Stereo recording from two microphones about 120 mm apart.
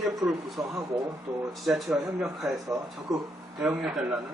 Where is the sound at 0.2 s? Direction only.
Centre (ahead or behind).